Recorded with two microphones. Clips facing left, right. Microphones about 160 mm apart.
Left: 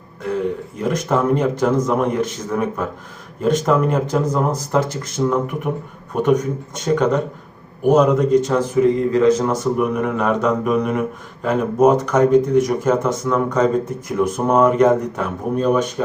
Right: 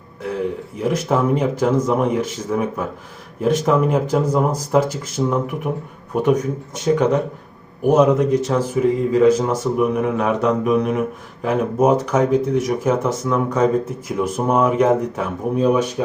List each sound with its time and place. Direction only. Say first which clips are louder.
0.8 s speech: even; 5° right (ahead or behind)
6.8 s speech: right 1 dB; 5° right (ahead or behind)